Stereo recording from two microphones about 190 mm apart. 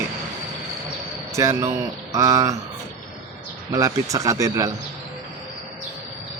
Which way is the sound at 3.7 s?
15° right (ahead or behind).